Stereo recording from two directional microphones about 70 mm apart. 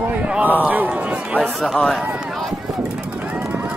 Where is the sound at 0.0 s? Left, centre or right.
Centre.